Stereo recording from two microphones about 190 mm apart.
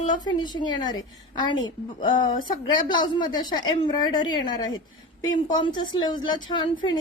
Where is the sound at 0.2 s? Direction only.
25° left (ahead or behind).